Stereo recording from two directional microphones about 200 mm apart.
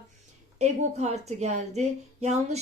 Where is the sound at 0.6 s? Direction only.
35° right (ahead or behind).